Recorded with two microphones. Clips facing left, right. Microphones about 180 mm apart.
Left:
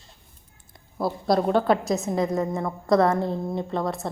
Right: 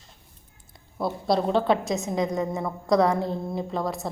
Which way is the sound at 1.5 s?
25° right (ahead or behind).